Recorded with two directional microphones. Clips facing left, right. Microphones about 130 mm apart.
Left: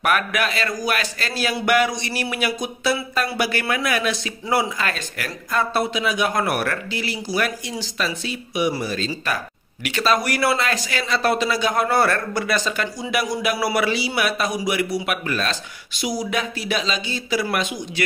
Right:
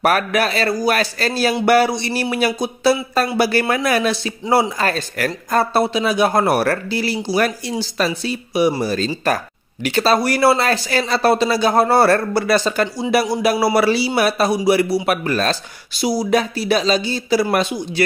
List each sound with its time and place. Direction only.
0.0 s speech: 35° right (ahead or behind)